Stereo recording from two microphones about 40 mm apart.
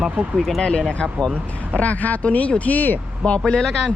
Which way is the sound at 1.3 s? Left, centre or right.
Left.